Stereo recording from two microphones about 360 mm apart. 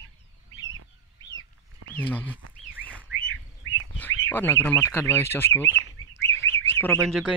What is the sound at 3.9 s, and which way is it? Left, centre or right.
Speech, centre.